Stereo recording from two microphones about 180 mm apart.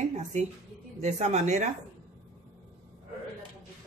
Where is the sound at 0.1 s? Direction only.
40° right (ahead or behind).